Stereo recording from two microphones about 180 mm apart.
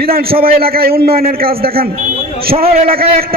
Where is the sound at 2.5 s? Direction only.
35° right (ahead or behind).